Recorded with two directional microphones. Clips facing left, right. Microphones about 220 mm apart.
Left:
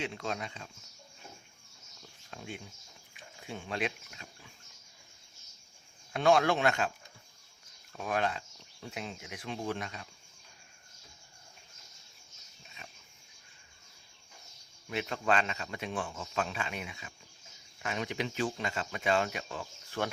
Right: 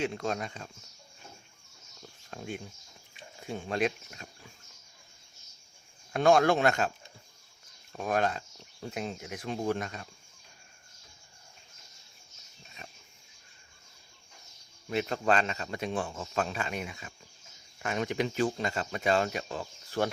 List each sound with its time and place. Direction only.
0.0 s speech: 40° right (ahead or behind)
2.3 s speech: 45° right (ahead or behind)
6.1 s speech: 45° right (ahead or behind)
7.9 s speech: 45° right (ahead or behind)
14.8 s speech: 40° right (ahead or behind)